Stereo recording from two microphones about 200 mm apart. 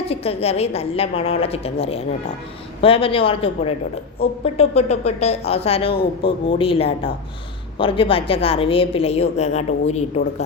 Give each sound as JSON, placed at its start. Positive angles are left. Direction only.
{"t": 0.1, "sound": "a woman's voice", "side_deg": 30}